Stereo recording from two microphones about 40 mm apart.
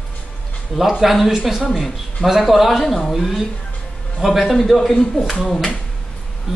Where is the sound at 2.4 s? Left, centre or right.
Centre.